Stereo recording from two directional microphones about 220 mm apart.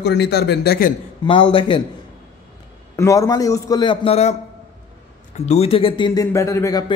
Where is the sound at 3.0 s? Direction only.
15° left (ahead or behind).